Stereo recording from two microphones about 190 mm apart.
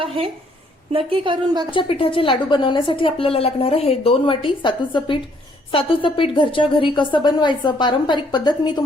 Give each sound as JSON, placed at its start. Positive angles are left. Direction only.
{"t": 0.9, "sound": "a woman's voice", "side_deg": -25}
{"t": 1.7, "sound": "a woman's voice", "side_deg": 30}